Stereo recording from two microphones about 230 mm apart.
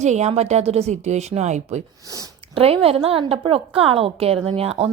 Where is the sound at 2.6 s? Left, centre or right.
Right.